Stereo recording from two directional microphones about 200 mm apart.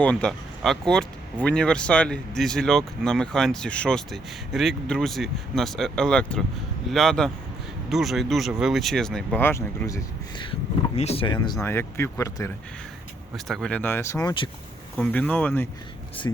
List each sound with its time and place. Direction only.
0.0 s speech: 5° left (ahead or behind)
10.9 s speech: 30° left (ahead or behind); by 12.5 s 15° left (ahead or behind)
13.3 s speech: centre (ahead or behind); by 14.5 s 20° left (ahead or behind)
14.9 s speech: 5° left (ahead or behind)